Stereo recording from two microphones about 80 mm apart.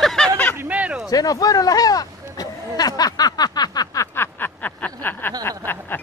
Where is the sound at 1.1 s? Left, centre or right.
Left.